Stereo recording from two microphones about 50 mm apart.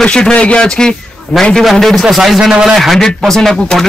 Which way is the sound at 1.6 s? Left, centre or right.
Centre.